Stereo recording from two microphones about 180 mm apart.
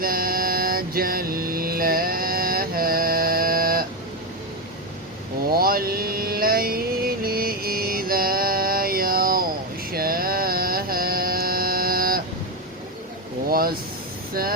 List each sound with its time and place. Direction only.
0.0 s mantra: 55° right (ahead or behind)
5.5 s mantra: 55° right (ahead or behind)
13.5 s air conditioning: 55° right (ahead or behind)